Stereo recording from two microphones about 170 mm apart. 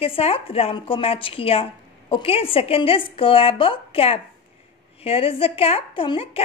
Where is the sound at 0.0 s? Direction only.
35° left (ahead or behind).